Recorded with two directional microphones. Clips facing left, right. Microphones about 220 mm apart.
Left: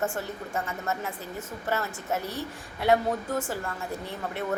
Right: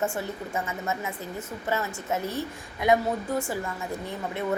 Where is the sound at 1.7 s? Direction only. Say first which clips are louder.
Right 1 dB; 15° right (ahead or behind).